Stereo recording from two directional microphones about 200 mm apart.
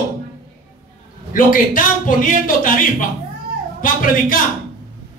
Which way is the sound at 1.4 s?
45° left (ahead or behind).